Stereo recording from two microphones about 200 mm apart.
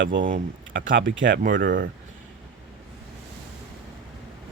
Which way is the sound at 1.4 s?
45° right (ahead or behind).